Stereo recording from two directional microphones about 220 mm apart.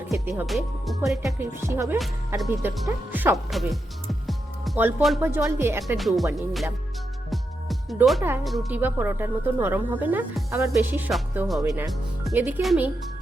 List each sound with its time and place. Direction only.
0.1 s speech: 5° right (ahead or behind)
1.4 s speech: 10° right (ahead or behind)
4.3 s music: centre (ahead or behind)
5.2 s speech: 10° right (ahead or behind)
6.0 s speech: centre (ahead or behind)
7.3 s music: centre (ahead or behind)
8.4 s speech: 5° right (ahead or behind)
11.7 s music: centre (ahead or behind)
12.3 s speech: 10° right (ahead or behind)